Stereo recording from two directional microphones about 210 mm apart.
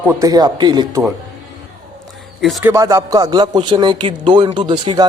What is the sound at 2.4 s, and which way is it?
Speech, centre (ahead or behind).